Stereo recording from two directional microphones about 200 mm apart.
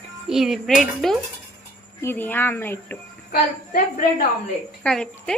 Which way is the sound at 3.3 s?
45° left (ahead or behind).